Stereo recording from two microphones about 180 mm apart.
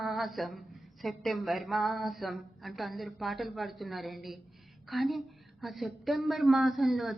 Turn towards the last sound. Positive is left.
turn(degrees=0)  # may be behind; listen again after turning